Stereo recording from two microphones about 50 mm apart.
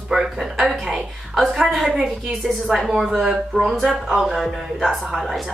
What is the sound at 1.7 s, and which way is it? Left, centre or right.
A woman's voice, centre.